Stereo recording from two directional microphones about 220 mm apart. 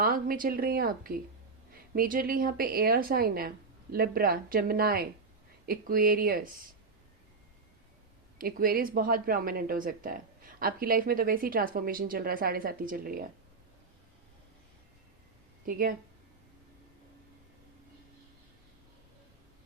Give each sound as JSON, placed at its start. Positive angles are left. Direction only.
{"t": 0.0, "sound": "a woman's voice", "side_deg": -40}
{"t": 8.4, "sound": "a woman's voice", "side_deg": -40}
{"t": 15.6, "sound": "a woman's voice", "side_deg": -40}